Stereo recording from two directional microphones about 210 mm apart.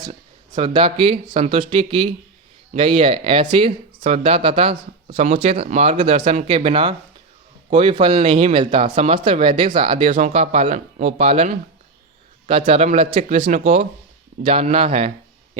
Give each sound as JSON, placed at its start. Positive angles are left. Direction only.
{"t": 0.1, "sound": "speech", "side_deg": -25}